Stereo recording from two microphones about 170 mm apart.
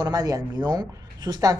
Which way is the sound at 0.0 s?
20° right (ahead or behind).